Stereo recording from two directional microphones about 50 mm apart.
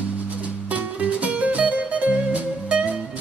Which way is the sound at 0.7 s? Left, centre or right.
Right.